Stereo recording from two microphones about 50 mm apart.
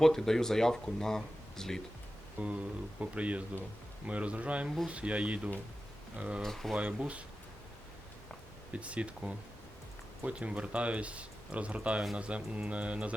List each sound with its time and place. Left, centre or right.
0.0 s speech: centre
2.4 s speech: right
6.4 s speech: centre
7.0 s speech: right
8.7 s speech: right